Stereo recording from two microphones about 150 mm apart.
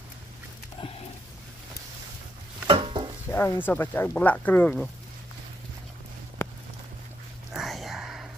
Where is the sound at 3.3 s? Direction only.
15° left (ahead or behind).